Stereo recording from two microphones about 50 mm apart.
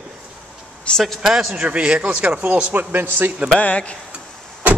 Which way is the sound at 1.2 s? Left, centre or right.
Centre.